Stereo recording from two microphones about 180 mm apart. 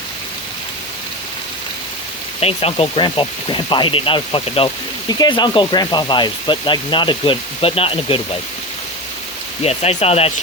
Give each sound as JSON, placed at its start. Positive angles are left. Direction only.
{"t": 2.4, "sound": "speech", "side_deg": 35}
{"t": 9.6, "sound": "speech", "side_deg": 35}